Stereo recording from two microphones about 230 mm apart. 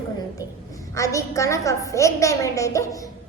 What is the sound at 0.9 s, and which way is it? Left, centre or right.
A woman's voice, centre.